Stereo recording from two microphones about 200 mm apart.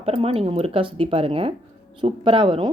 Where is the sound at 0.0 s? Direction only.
30° right (ahead or behind).